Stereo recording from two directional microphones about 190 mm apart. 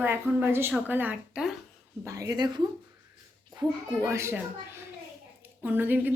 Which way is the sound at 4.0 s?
15° right (ahead or behind).